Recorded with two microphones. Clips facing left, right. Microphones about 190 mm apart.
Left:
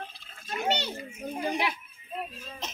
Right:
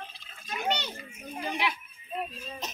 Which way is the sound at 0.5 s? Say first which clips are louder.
Left 2 dB; 35° left (ahead or behind).